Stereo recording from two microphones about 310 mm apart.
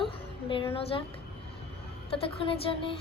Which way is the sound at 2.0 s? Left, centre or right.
Centre.